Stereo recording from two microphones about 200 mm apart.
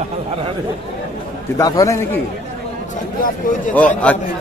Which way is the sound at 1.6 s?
15° left (ahead or behind).